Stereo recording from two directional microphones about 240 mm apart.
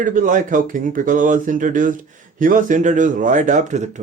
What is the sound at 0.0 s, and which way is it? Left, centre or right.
A man's voice, right.